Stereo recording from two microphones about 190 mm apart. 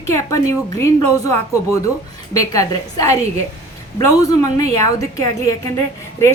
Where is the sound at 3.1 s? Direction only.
35° right (ahead or behind).